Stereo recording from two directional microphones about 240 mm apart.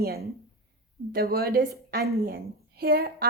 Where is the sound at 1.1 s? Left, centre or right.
Right.